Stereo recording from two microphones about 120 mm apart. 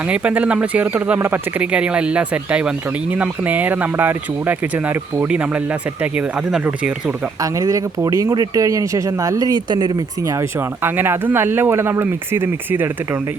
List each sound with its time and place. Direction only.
0.1 s speech: 10° right (ahead or behind)
7.4 s speech: 30° right (ahead or behind)
10.8 s speech: 20° right (ahead or behind)